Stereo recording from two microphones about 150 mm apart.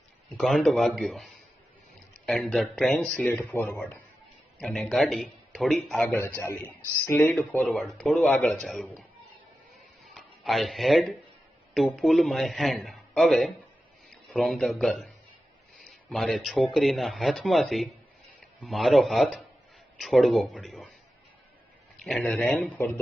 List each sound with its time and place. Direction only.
0.3 s speech: centre (ahead or behind)
6.1 s speech: 15° left (ahead or behind); by 9.0 s centre (ahead or behind)
10.2 s speech: centre (ahead or behind)
21.9 s speech: 5° left (ahead or behind)